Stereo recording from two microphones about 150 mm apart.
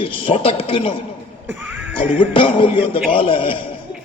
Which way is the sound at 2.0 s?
35° left (ahead or behind).